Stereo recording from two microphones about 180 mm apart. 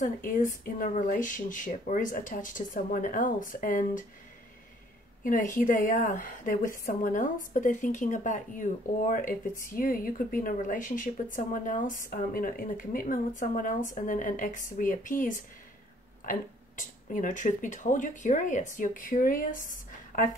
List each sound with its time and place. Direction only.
0.0 s speech: 50° left (ahead or behind)
5.6 s speech: 50° left (ahead or behind)